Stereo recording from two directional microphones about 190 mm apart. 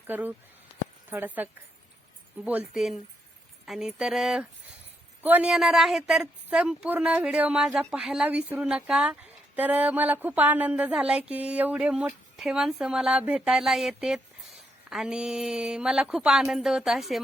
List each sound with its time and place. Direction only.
0.1 s a woman's voice: 10° right (ahead or behind)